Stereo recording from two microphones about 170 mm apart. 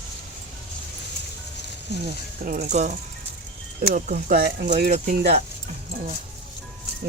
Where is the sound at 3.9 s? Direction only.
50° right (ahead or behind).